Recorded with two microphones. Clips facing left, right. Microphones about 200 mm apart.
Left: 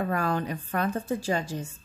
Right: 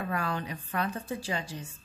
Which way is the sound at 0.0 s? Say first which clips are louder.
Left 5 dB; 45° left (ahead or behind).